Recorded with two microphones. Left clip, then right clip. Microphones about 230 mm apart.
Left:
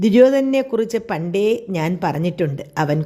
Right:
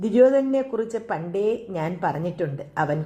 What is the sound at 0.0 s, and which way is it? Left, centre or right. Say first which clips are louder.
Speech: left 4 dB; left.